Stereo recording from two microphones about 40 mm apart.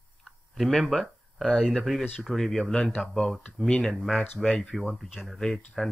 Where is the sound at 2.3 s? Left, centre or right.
Centre.